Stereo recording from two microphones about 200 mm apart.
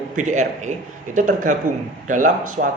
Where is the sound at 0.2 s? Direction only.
35° right (ahead or behind).